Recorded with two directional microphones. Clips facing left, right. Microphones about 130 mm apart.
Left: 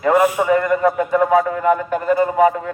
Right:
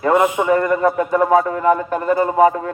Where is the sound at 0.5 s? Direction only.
35° right (ahead or behind).